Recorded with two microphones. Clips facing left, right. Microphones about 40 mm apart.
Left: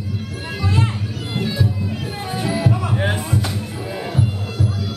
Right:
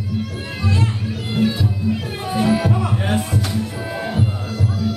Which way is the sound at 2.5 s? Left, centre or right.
Right.